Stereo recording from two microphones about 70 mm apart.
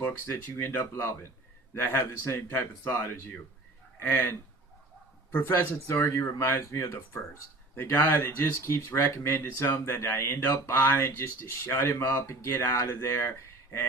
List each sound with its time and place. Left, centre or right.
0.3 s speech: left
5.5 s speech: left